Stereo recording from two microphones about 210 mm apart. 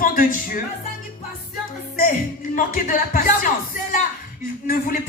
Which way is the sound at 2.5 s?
40° left (ahead or behind).